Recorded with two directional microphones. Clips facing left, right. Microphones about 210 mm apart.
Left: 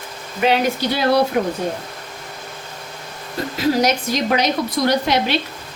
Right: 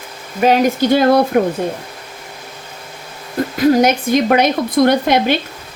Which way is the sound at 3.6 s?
55° right (ahead or behind).